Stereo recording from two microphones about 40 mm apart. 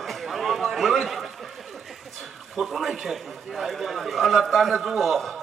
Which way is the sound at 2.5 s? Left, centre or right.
Centre.